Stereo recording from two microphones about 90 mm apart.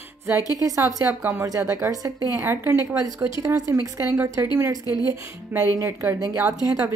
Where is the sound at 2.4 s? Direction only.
30° right (ahead or behind).